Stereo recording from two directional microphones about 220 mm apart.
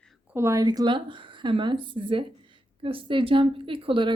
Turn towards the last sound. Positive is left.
turn(degrees=-25)  # may be behind; listen again after turning